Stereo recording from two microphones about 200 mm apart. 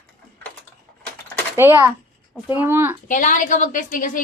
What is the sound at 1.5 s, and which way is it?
Speech, 10° right (ahead or behind).